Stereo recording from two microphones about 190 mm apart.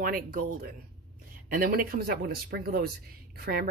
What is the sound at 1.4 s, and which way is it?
Speech, 50° right (ahead or behind).